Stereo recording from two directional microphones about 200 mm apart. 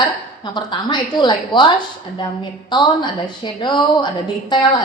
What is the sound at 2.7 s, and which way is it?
A woman's voice, 25° left (ahead or behind).